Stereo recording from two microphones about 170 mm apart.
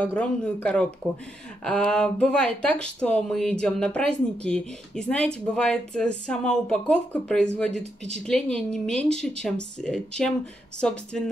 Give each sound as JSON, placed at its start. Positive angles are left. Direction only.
{"t": 0.0, "sound": "speech", "side_deg": 10}